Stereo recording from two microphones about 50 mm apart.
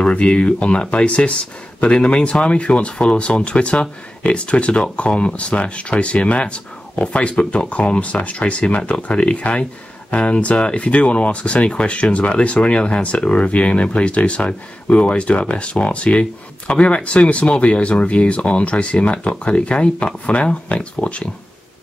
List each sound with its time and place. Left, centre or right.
0.0 s speech: left